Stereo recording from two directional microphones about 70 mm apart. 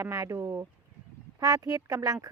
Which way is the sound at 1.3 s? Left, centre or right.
Right.